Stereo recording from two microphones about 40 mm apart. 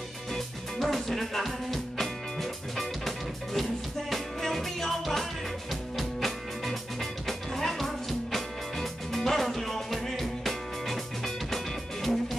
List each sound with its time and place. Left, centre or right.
0.3 s music: centre